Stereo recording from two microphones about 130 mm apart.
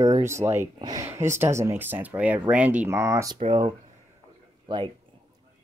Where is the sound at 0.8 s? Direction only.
30° right (ahead or behind).